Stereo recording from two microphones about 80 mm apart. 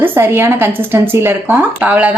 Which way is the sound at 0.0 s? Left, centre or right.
Right.